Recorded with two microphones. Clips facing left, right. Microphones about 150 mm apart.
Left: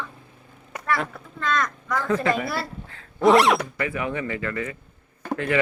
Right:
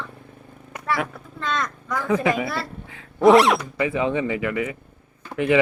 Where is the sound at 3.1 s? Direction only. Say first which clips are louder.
Right 3 dB; centre (ahead or behind).